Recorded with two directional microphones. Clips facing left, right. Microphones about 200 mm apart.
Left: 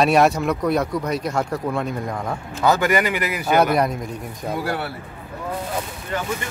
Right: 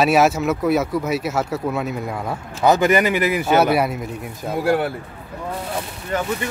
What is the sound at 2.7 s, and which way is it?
Speech, 20° right (ahead or behind).